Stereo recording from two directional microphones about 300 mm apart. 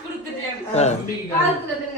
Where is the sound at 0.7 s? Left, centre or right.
Left.